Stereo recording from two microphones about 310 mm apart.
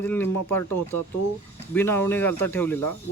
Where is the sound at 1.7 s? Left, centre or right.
Centre.